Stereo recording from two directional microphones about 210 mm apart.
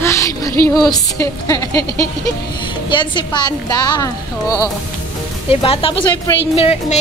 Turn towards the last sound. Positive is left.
turn(degrees=30)  # may be behind; listen again after turning